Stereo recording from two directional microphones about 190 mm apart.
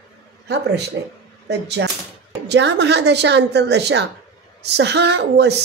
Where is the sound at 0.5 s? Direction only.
60° right (ahead or behind).